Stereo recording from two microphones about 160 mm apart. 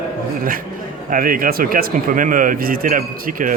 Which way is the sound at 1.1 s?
60° right (ahead or behind).